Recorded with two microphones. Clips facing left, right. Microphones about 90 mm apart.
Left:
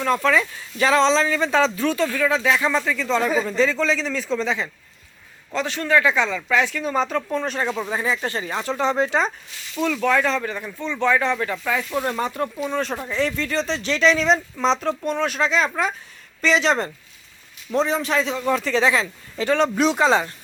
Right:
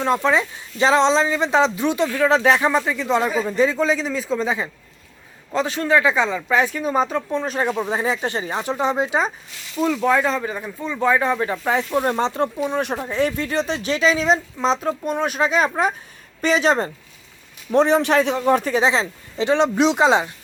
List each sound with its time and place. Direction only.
0.0 s speech: 20° right (ahead or behind)
4.4 s speech: 20° right (ahead or behind)
5.5 s speech: 30° right (ahead or behind); by 7.5 s 5° right (ahead or behind)
7.6 s speech: 15° right (ahead or behind)
17.7 s a man's voice: 65° right (ahead or behind)
18.6 s speech: 20° right (ahead or behind)